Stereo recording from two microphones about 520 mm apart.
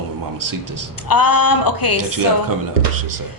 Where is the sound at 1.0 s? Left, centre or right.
Left.